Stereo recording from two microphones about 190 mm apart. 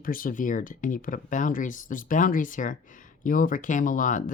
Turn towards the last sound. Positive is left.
turn(degrees=45)  # may be behind; listen again after turning